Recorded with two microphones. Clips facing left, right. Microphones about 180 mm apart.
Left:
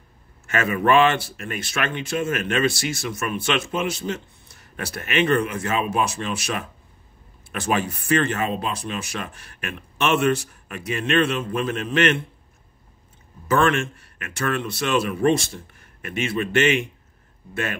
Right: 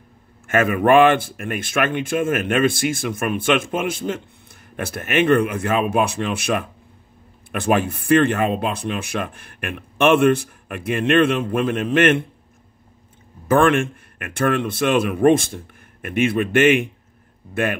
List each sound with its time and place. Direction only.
0.5 s speech: 50° right (ahead or behind)
13.5 s speech: 55° right (ahead or behind)